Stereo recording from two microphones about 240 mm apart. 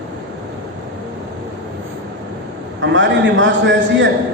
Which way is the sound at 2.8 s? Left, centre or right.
Right.